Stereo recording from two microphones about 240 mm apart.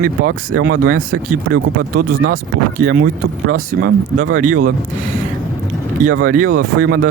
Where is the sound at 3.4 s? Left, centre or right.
Right.